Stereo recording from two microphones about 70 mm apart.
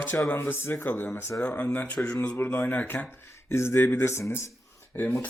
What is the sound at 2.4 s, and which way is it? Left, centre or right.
Speech, left.